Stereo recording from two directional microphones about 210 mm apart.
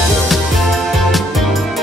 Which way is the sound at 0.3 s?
Centre (ahead or behind).